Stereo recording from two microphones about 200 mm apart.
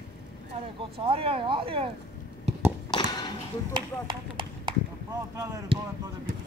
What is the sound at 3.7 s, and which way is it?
Speech, 25° right (ahead or behind).